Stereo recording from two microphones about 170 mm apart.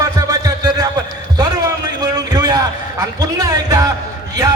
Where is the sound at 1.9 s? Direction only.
20° right (ahead or behind).